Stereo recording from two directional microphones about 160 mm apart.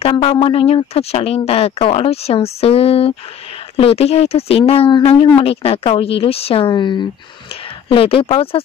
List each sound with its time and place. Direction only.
0.0 s speech: 35° left (ahead or behind)